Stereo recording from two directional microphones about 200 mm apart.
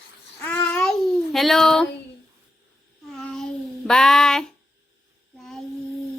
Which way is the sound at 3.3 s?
Centre (ahead or behind).